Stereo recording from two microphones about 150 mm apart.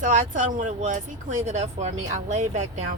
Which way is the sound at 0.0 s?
55° right (ahead or behind).